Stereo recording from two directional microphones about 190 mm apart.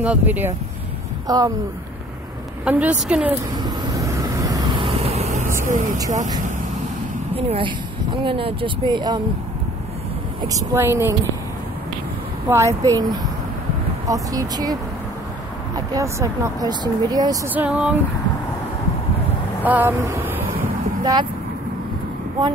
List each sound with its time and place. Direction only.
0.0 s speech: 10° right (ahead or behind)
1.2 s speech: 20° right (ahead or behind)
2.6 s speech: 5° right (ahead or behind)
3.6 s vehicle: 15° right (ahead or behind); by 5.5 s 35° right (ahead or behind)
7.3 s speech: 30° right (ahead or behind)
10.5 s speech: 15° right (ahead or behind)
12.4 s speech: 15° right (ahead or behind)
17.6 s speech: 5° right (ahead or behind)
19.6 s speech: 10° right (ahead or behind)